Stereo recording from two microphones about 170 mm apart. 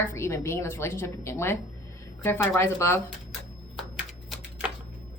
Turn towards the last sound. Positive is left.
turn(degrees=-5)  # may be behind; listen again after turning